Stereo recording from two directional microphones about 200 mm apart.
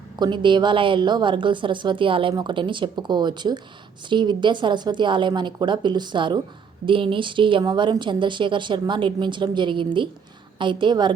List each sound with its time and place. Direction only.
0.2 s a woman's voice: 25° right (ahead or behind)